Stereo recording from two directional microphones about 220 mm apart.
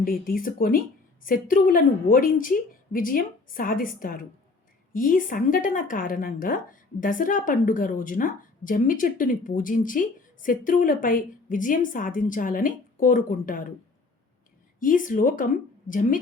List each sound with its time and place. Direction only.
0.0 s a woman's voice: 40° left (ahead or behind)
14.8 s a woman's voice: 40° left (ahead or behind)